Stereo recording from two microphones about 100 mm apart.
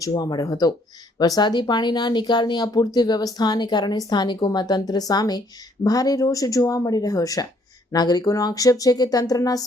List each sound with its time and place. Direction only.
0.0 s speech: 40° left (ahead or behind)